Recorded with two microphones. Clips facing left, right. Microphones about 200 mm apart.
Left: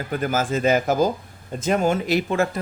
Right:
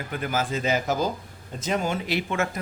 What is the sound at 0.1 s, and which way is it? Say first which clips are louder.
Speech: left 5 dB; 45° left (ahead or behind).